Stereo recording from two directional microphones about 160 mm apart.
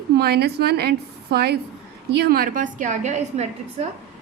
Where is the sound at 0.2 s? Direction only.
90° right.